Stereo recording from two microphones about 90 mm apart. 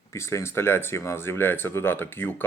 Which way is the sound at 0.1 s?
30° left (ahead or behind).